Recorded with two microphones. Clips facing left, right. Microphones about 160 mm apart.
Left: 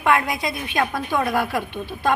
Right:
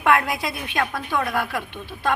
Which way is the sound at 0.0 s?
Centre (ahead or behind).